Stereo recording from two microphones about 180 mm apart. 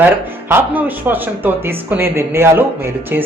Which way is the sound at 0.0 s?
10° right (ahead or behind).